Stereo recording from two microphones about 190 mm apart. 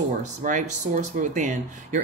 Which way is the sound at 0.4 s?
40° right (ahead or behind).